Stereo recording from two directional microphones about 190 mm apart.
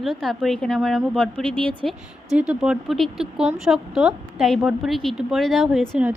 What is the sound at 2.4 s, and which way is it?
A woman's voice, 5° right (ahead or behind).